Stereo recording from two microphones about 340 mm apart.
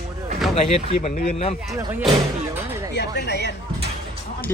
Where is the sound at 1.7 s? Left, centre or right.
Centre.